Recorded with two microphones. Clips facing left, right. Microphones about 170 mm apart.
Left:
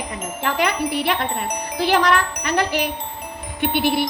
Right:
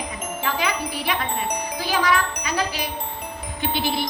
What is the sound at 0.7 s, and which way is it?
Child singing, 70° left (ahead or behind).